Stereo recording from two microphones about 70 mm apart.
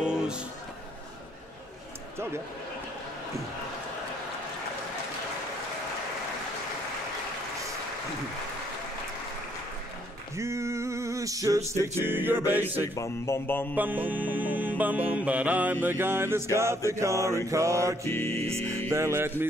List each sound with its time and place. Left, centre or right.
0.0 s a sound: centre
10.3 s a sound: right
12.0 s mantra: right
12.8 s music: left
13.7 s mantra: right
16.5 s music: right
18.0 s music: left
18.9 s music: right